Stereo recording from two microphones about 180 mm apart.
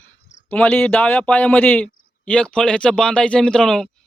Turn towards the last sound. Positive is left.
turn(degrees=5)  # may be behind; listen again after turning